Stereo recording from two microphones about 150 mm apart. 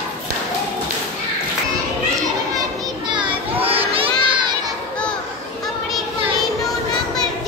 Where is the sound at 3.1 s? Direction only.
35° right (ahead or behind).